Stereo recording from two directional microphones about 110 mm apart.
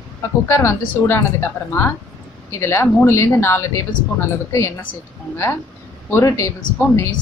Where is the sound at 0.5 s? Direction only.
25° left (ahead or behind).